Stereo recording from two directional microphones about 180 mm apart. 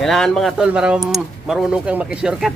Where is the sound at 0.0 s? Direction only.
5° left (ahead or behind).